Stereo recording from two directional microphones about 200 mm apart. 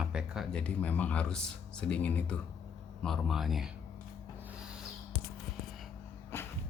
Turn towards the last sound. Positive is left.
turn(degrees=10)  # may be behind; listen again after turning